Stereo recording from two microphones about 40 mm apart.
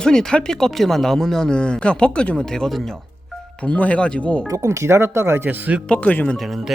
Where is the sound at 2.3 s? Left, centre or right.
Centre.